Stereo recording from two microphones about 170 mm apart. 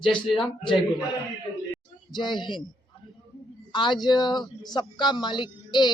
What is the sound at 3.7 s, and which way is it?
Speech, 25° left (ahead or behind).